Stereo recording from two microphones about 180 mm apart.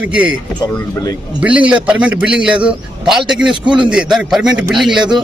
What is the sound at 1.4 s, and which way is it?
A man's voice, 5° right (ahead or behind).